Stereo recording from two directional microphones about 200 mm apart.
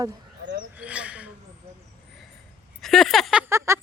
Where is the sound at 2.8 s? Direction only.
Centre (ahead or behind).